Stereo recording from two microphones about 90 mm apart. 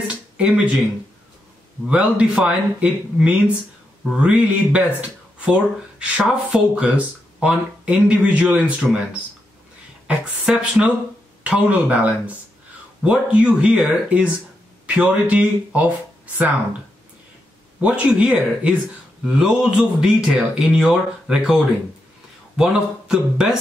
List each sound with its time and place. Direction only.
0.4 s a man's voice: 15° right (ahead or behind)
1.9 s a man's voice: 10° right (ahead or behind)
17.7 s a man's voice: 15° right (ahead or behind)
22.6 s a man's voice: 10° right (ahead or behind)